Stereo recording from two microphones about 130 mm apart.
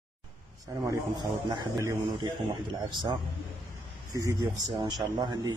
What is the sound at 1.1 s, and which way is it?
Speech, 35° right (ahead or behind).